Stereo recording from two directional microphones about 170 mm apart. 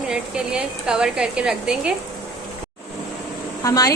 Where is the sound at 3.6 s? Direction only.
20° left (ahead or behind).